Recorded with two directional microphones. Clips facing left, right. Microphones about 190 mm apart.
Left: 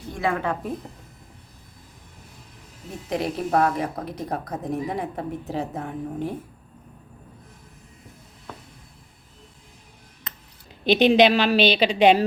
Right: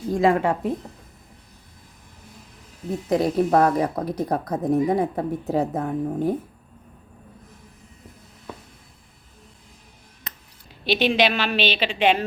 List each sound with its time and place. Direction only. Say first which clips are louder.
0.2 s speech: right 5 dB; 30° right (ahead or behind)
3.1 s speech: right 5 dB; 40° right (ahead or behind)
10.9 s a woman's voice: left 4 dB; 35° left (ahead or behind)